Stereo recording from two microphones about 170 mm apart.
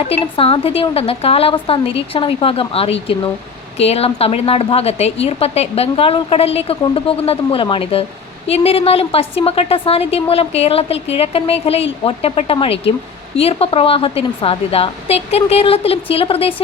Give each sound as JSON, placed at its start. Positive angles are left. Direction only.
{"t": 0.1, "sound": "a woman's voice", "side_deg": 35}